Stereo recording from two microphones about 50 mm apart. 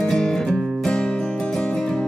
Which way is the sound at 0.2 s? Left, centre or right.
Centre.